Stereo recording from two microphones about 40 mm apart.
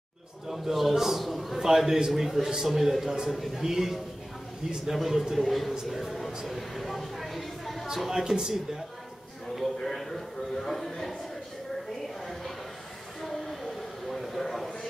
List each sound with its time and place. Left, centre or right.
0.5 s a man's voice: centre
1.7 s a man's voice: centre
4.9 s a man's voice: centre
7.9 s a man's voice: centre
9.9 s music: centre
13.2 s a sound: centre